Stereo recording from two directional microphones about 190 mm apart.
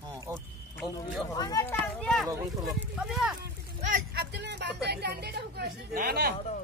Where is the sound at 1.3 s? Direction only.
20° left (ahead or behind).